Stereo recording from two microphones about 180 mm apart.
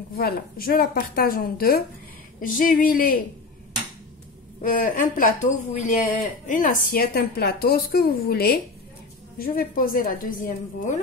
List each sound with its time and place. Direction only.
0.1 s a woman's voice: 55° left (ahead or behind)
4.6 s speech: 45° left (ahead or behind)